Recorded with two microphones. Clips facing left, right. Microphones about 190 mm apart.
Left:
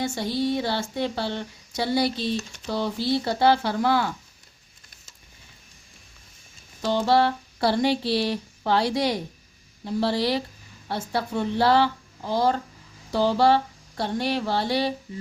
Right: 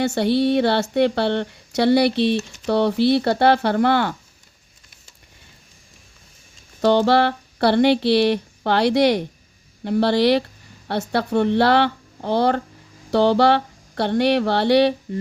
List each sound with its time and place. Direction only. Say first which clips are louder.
0.0 s speech: right 7 dB; 70° right (ahead or behind)
6.8 s speech: right 5 dB; 70° right (ahead or behind)
13.1 s a sound: right 4 dB; 70° right (ahead or behind)